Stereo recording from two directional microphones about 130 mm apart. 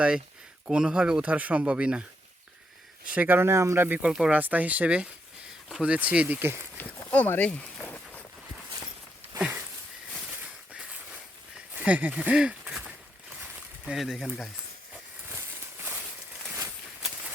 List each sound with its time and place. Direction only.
0.7 s speech: 5° right (ahead or behind)
3.1 s speech: 15° right (ahead or behind)
6.7 s walk: 10° left (ahead or behind)
10.7 s a sound: 10° right (ahead or behind)
11.7 s speech: 10° right (ahead or behind)
13.8 s speech: centre (ahead or behind)
15.3 s a sound: 15° right (ahead or behind)